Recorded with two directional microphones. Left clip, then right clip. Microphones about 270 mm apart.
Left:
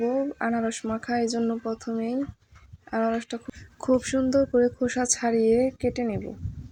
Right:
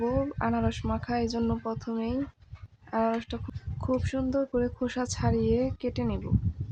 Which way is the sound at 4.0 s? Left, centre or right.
Centre.